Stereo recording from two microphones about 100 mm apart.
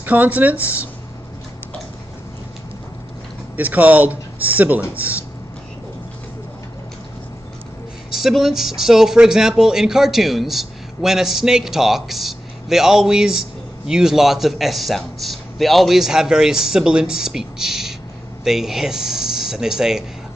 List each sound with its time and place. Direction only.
0.0 s speech: 15° right (ahead or behind)
3.5 s speech: 15° right (ahead or behind)
8.1 s speech: 5° right (ahead or behind)